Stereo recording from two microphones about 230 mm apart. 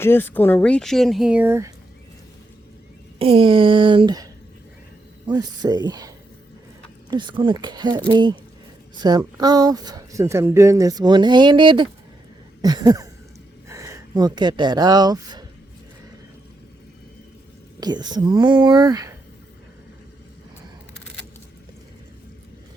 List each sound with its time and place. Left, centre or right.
0.0 s speech: centre
3.2 s speech: right
5.3 s speech: centre
17.7 s speech: centre